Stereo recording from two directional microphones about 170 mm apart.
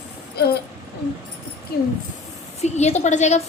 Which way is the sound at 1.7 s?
65° left (ahead or behind).